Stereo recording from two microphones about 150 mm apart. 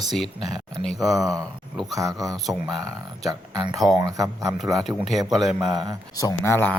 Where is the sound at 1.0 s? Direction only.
25° right (ahead or behind).